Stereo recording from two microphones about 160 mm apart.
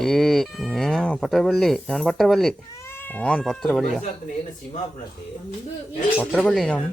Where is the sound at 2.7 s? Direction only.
15° left (ahead or behind).